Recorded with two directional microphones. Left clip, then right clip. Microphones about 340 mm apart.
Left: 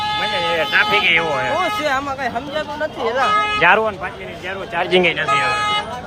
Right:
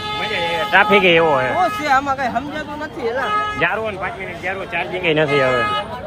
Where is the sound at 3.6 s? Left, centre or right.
Centre.